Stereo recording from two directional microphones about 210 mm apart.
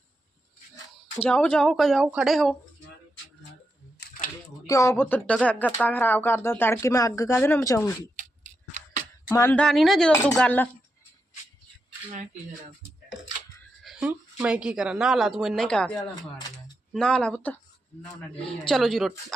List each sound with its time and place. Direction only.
1.2 s speech: 5° left (ahead or behind)
4.6 s speech: 15° left (ahead or behind)
8.7 s scissors: 35° right (ahead or behind)
9.3 s speech: 10° left (ahead or behind)
13.8 s speech: 5° right (ahead or behind)
16.9 s speech: 5° left (ahead or behind)
18.6 s speech: centre (ahead or behind)